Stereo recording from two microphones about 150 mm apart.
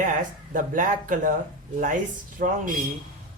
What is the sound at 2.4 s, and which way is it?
Speech, 65° right (ahead or behind).